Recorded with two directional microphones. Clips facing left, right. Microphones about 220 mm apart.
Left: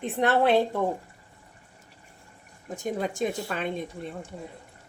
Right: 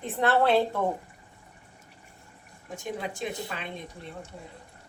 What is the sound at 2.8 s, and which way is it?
Speech, 45° left (ahead or behind).